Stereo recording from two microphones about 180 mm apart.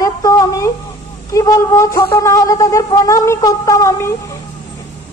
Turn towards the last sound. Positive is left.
turn(degrees=15)  # may be behind; listen again after turning